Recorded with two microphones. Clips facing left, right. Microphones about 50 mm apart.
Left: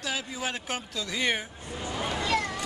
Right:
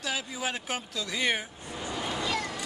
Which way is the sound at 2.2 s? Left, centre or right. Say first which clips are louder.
Left 5 dB; left.